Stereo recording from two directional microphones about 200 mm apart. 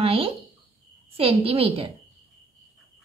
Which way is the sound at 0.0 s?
30° right (ahead or behind).